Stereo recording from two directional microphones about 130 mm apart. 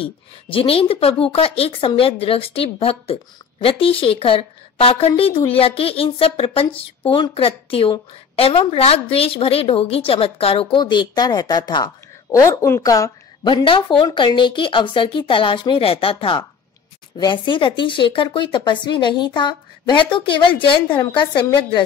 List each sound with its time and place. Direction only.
0.0 s a woman's voice: 45° left (ahead or behind)
12.4 s a woman's voice: 20° left (ahead or behind); by 21.8 s 40° left (ahead or behind)